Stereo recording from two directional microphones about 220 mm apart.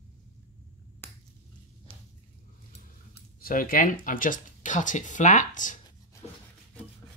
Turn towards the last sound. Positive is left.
turn(degrees=35)  # may be behind; listen again after turning